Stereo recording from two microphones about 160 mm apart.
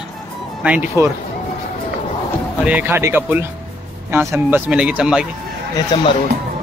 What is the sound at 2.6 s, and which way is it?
Speech, 10° right (ahead or behind).